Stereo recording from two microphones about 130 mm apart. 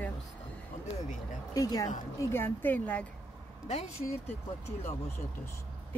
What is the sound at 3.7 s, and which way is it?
Speech, 55° left (ahead or behind).